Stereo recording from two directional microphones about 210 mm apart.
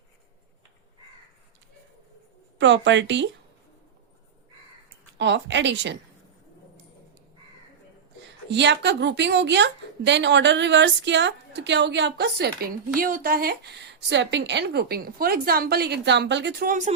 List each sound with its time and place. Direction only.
2.6 s a woman's voice: 60° right (ahead or behind)
5.1 s a woman's voice: 55° right (ahead or behind)
8.4 s a woman's voice: 55° right (ahead or behind); by 16.9 s 40° right (ahead or behind)